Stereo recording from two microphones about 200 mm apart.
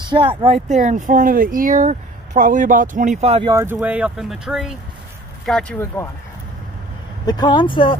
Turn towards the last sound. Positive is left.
turn(degrees=25)  # may be behind; listen again after turning